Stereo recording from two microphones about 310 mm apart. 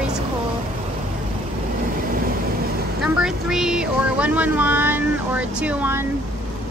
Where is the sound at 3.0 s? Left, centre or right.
Centre.